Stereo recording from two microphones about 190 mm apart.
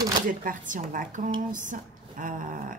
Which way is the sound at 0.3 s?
45° right (ahead or behind).